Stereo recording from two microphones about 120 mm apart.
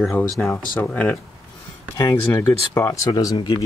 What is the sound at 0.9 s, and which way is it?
Speech, 15° left (ahead or behind).